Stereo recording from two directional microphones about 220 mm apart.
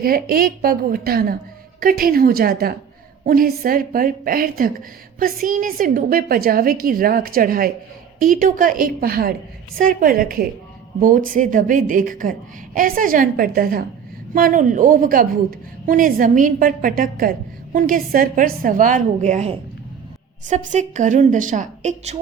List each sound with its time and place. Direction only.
0.0 s a woman's voice: 40° right (ahead or behind)